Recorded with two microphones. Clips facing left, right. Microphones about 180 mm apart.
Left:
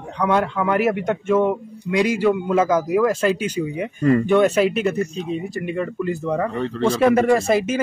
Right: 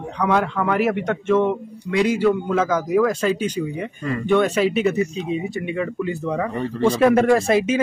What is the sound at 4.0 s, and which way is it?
Speech, 40° left (ahead or behind).